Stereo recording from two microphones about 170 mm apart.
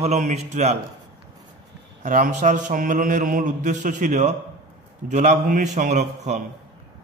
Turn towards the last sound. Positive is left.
turn(degrees=-45)  # may be behind; listen again after turning